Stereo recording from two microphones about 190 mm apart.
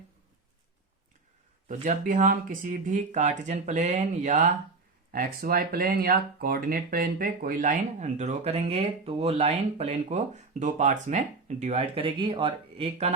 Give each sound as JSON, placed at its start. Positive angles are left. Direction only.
{"t": 1.6, "sound": "speech", "side_deg": -45}
{"t": 5.1, "sound": "speech", "side_deg": -50}